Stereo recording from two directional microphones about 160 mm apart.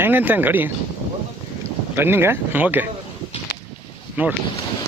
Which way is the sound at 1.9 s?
15° right (ahead or behind).